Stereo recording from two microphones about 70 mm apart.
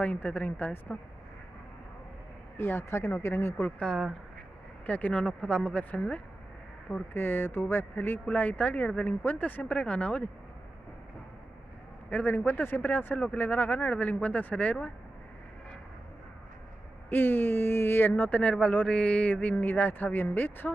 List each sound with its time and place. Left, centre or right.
0.0 s speech: left
2.5 s speech: left
3.6 s speech: centre
6.9 s speech: left
12.1 s speech: left
17.1 s speech: left
18.4 s speech: centre